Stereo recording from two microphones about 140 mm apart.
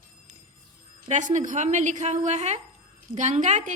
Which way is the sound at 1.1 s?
60° right (ahead or behind).